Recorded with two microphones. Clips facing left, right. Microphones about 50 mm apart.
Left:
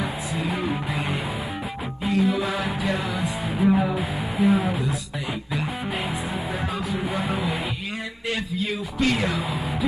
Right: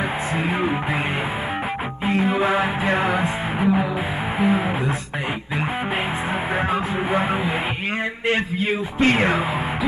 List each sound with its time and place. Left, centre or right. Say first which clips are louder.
0.4 s music: right 3 dB; right
2.0 s music: right 3 dB; right
6.7 s music: right 6 dB; right